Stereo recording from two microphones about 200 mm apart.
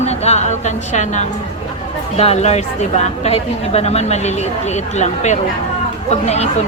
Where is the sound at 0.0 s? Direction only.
35° left (ahead or behind).